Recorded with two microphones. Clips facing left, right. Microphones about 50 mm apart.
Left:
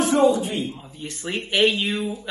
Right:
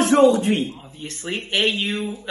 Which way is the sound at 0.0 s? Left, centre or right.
Right.